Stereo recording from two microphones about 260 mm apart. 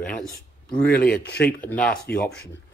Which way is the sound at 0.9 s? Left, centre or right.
Left.